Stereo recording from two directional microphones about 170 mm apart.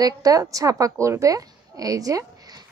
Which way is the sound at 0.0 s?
20° right (ahead or behind).